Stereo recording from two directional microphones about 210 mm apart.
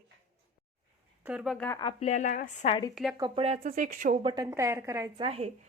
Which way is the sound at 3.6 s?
40° right (ahead or behind).